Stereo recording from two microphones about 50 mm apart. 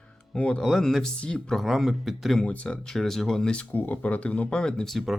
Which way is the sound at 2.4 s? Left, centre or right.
Left.